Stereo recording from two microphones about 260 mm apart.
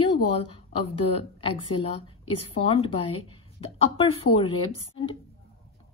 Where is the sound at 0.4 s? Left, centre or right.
Left.